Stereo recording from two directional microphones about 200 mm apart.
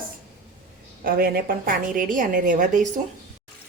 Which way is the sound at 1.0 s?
50° right (ahead or behind).